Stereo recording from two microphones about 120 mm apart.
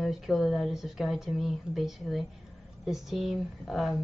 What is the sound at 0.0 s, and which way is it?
Speech, centre (ahead or behind).